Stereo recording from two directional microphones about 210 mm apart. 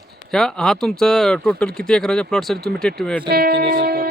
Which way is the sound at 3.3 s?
50° right (ahead or behind).